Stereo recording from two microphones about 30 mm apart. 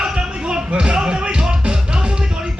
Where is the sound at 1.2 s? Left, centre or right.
Right.